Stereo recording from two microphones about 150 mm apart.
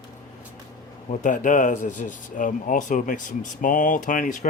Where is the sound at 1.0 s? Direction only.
60° left (ahead or behind).